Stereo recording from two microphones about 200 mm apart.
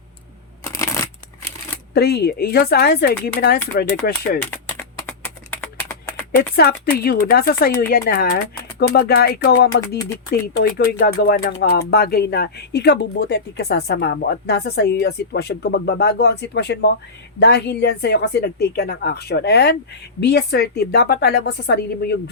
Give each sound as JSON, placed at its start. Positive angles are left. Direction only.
{"t": 0.6, "sound": "shuffling cards", "side_deg": 15}
{"t": 1.9, "sound": "speech", "side_deg": 55}
{"t": 4.5, "sound": "a sound", "side_deg": 10}
{"t": 6.3, "sound": "speech", "side_deg": 50}